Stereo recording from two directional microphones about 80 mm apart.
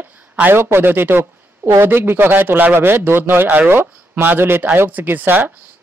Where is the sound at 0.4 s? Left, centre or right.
Right.